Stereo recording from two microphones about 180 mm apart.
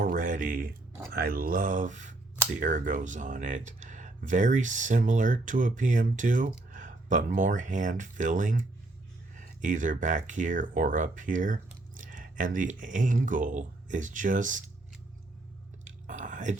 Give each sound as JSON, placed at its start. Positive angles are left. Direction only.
{"t": 0.0, "sound": "a sound", "side_deg": -50}
{"t": 1.1, "sound": "speech", "side_deg": -55}
{"t": 15.8, "sound": "whispering", "side_deg": -45}